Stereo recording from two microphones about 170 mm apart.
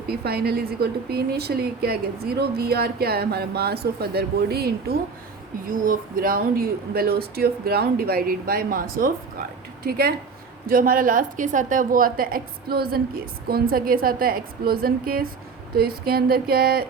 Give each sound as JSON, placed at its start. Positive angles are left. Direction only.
{"t": 0.1, "sound": "a woman's voice", "side_deg": -65}
{"t": 5.7, "sound": "a woman's voice", "side_deg": -55}